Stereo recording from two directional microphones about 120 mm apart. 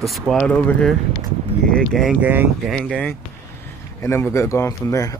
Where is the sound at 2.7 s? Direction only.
10° left (ahead or behind).